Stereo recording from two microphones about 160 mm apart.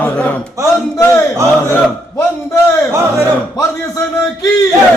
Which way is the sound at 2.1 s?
15° left (ahead or behind).